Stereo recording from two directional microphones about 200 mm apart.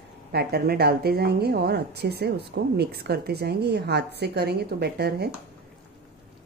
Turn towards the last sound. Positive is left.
turn(degrees=-55)  # may be behind; listen again after turning